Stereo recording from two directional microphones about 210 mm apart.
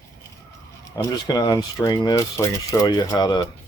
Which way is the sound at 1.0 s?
20° left (ahead or behind).